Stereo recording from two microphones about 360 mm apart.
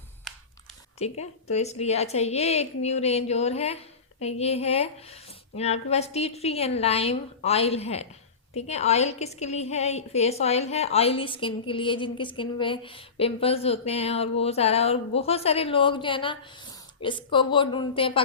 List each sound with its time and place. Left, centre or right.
1.2 s a woman's voice: centre